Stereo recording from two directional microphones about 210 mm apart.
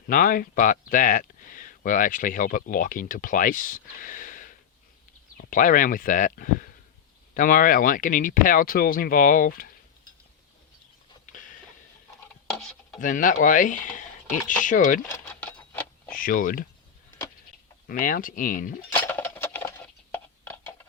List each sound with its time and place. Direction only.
0.1 s speech: 40° left (ahead or behind)
13.0 s speech: 40° left (ahead or behind)
15.1 s a sound: 5° left (ahead or behind)
16.1 s speech: 40° left (ahead or behind)
17.8 s speech: 40° left (ahead or behind)
18.9 s dishes: 15° left (ahead or behind)